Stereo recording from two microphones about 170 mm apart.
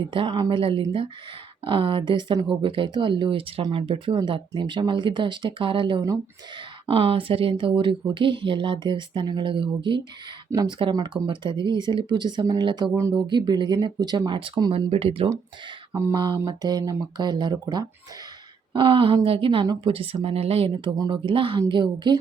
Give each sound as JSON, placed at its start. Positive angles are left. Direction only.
{"t": 0.1, "sound": "speech", "side_deg": -30}
{"t": 15.9, "sound": "a sound", "side_deg": -15}
{"t": 16.4, "sound": "speech", "side_deg": -20}